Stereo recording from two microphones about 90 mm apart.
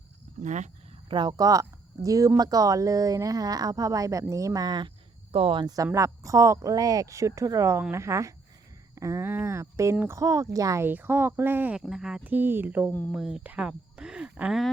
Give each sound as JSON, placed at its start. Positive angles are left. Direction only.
{"t": 1.0, "sound": "speech", "side_deg": -60}
{"t": 1.4, "sound": "speech", "side_deg": -40}
{"t": 5.3, "sound": "speech", "side_deg": -85}
{"t": 5.6, "sound": "speech", "side_deg": -40}
{"t": 10.8, "sound": "speech", "side_deg": -25}
{"t": 11.8, "sound": "speech", "side_deg": -5}
{"t": 12.2, "sound": "speech", "side_deg": -20}
{"t": 13.1, "sound": "speech", "side_deg": -5}
{"t": 13.4, "sound": "speech", "side_deg": -15}